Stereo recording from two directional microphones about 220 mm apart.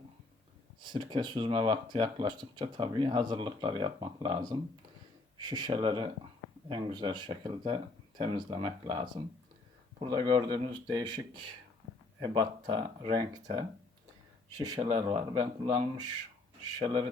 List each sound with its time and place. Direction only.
0.8 s speech: 20° right (ahead or behind)